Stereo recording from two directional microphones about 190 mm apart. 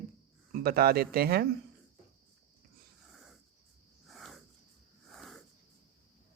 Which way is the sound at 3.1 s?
Centre (ahead or behind).